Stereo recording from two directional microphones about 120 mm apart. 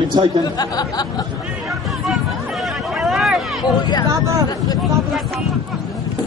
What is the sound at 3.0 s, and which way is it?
Vehicle, centre (ahead or behind).